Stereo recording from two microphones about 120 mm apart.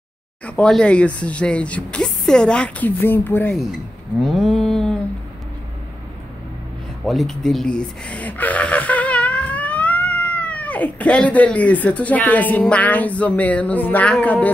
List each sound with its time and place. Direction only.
0.5 s speech: 10° left (ahead or behind)
4.2 s a sound: centre (ahead or behind)
7.1 s speech: centre (ahead or behind)